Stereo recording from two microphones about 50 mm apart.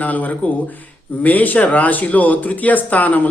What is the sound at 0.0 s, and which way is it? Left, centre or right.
A man's voice, left.